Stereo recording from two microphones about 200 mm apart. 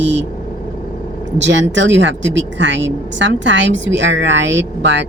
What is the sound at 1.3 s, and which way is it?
A woman's voice, 65° right (ahead or behind).